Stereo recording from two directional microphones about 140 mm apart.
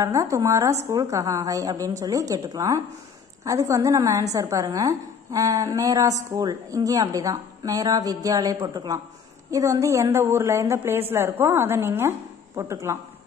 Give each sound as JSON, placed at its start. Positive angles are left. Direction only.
{"t": 0.0, "sound": "a woman's voice", "side_deg": -20}